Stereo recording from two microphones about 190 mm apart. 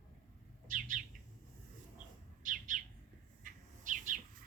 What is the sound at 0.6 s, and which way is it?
Bird, 45° right (ahead or behind).